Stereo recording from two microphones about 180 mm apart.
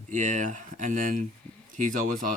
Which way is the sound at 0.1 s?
45° right (ahead or behind).